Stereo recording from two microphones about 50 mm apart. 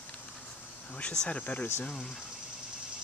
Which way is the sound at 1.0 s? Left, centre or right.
Centre.